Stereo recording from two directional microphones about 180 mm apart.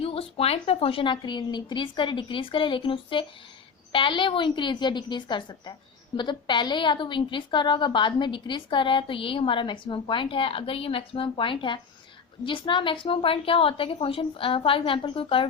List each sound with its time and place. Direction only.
0.0 s a woman's voice: 30° left (ahead or behind)